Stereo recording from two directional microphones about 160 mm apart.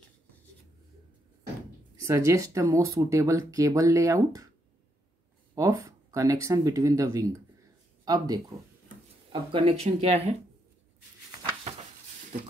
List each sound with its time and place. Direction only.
2.0 s speech: 20° right (ahead or behind)
5.5 s speech: 20° right (ahead or behind); by 10.3 s 40° right (ahead or behind)